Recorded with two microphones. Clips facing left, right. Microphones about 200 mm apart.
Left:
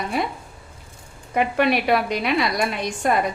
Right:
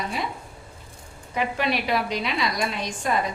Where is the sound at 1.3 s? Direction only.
55° left (ahead or behind).